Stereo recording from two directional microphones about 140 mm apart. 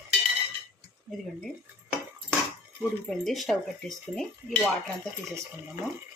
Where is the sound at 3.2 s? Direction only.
Centre (ahead or behind).